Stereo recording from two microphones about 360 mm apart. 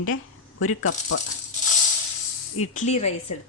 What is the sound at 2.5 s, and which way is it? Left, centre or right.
Speech, centre.